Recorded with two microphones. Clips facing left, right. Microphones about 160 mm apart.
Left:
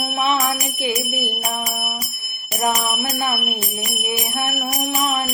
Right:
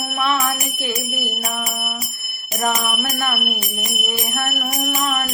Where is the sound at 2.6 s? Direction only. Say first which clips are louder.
Left 1 dB; 15° left (ahead or behind).